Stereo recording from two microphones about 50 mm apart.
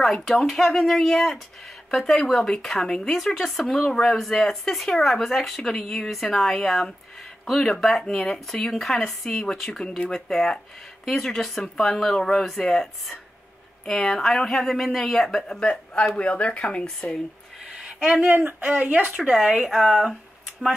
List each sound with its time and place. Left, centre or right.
0.0 s speech: centre
10.1 s speech: centre
16.2 s speech: left
18.3 s speech: right
19.2 s speech: centre